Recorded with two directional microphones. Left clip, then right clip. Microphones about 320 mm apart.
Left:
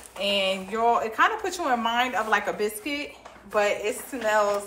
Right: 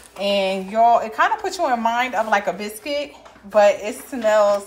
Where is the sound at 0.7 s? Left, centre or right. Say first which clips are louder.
Right 7 dB; centre.